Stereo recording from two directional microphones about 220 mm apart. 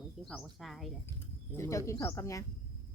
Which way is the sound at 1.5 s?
15° left (ahead or behind).